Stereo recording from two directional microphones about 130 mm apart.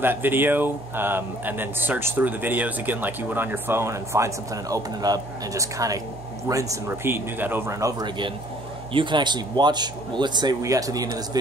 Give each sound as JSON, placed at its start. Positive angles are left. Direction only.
{"t": 0.0, "sound": "speech", "side_deg": -15}
{"t": 8.9, "sound": "speech", "side_deg": -35}